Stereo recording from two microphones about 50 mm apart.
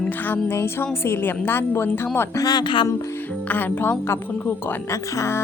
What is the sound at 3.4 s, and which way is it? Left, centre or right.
Speech, left.